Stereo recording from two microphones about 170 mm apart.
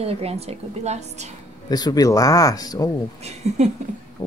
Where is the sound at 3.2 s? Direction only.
40° right (ahead or behind).